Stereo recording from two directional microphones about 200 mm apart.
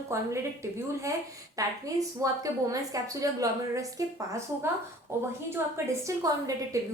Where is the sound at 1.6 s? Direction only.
15° right (ahead or behind).